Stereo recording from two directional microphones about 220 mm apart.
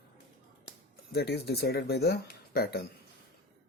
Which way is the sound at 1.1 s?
45° left (ahead or behind).